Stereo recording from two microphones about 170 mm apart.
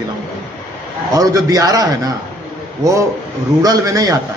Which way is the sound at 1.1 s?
20° right (ahead or behind).